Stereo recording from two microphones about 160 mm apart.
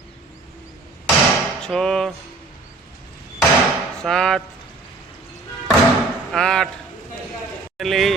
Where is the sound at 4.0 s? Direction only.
5° left (ahead or behind).